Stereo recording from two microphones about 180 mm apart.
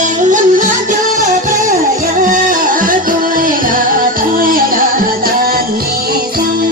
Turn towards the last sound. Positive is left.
turn(degrees=-55)  # may be behind; listen again after turning